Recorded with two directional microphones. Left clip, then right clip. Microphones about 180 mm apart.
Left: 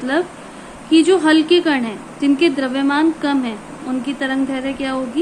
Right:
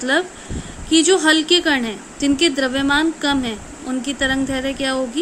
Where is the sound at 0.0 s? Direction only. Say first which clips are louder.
Right 1 dB; 55° right (ahead or behind).